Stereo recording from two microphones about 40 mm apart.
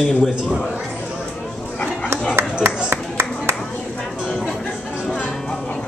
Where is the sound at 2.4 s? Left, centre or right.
Right.